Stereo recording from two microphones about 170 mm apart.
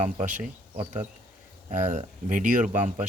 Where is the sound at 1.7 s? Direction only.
45° right (ahead or behind).